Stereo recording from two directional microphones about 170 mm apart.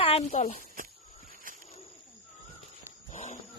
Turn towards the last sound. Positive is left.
turn(degrees=45)  # may be behind; listen again after turning